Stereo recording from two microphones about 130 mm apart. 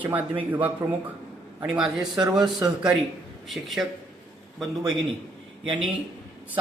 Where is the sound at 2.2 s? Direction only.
30° right (ahead or behind).